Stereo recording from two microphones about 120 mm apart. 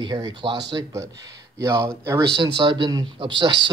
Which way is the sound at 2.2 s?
40° right (ahead or behind).